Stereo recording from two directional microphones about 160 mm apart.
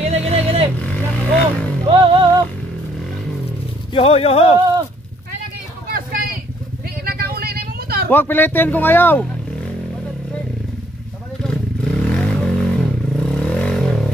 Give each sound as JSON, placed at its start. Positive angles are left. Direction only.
{"t": 0.1, "sound": "vehicle", "side_deg": -40}
{"t": 0.7, "sound": "vehicle", "side_deg": 10}
{"t": 1.9, "sound": "music", "side_deg": -30}
{"t": 3.9, "sound": "speech", "side_deg": 35}
{"t": 5.9, "sound": "vehicle", "side_deg": -65}
{"t": 8.1, "sound": "speech", "side_deg": 10}
{"t": 11.4, "sound": "vehicle", "side_deg": 5}